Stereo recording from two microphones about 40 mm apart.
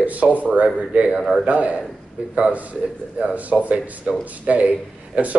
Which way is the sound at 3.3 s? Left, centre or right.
Right.